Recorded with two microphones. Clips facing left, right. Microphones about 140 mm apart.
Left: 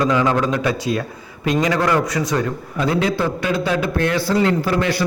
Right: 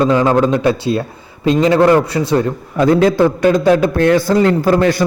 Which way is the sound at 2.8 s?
45° right (ahead or behind).